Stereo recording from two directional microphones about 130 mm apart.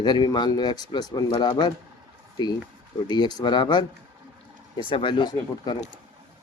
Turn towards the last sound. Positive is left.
turn(degrees=35)  # may be behind; listen again after turning